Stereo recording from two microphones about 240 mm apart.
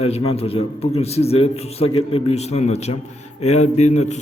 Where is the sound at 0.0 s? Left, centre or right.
Left.